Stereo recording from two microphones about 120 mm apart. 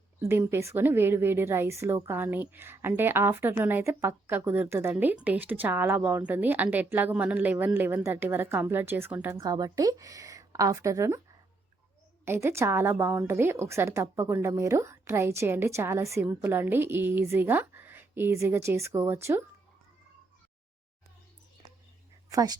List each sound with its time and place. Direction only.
0.2 s a woman's voice: 20° right (ahead or behind)
9.3 s a woman's voice: 30° right (ahead or behind)
12.2 s a woman's voice: 20° right (ahead or behind)
22.3 s speech: 30° right (ahead or behind)